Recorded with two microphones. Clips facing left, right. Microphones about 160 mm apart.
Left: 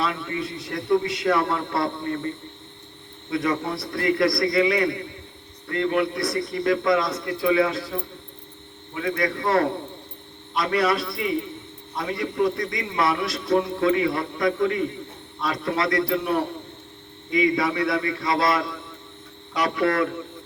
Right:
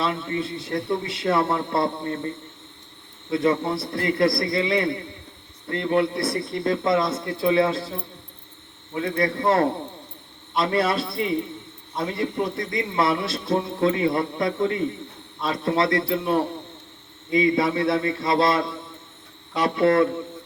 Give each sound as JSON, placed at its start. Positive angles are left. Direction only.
{"t": 0.0, "sound": "a man's voice", "side_deg": -30}
{"t": 3.3, "sound": "a man's voice", "side_deg": -30}